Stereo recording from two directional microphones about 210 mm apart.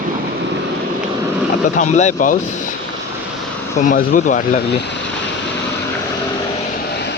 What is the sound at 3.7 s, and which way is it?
Speech, 40° left (ahead or behind).